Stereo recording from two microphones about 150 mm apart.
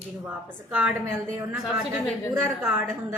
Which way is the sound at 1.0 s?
20° right (ahead or behind).